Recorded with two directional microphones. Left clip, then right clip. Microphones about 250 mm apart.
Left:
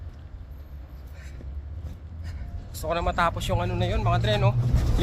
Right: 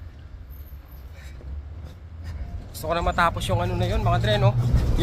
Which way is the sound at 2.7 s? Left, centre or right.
Centre.